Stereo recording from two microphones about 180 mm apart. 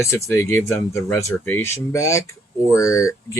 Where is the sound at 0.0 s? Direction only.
15° left (ahead or behind).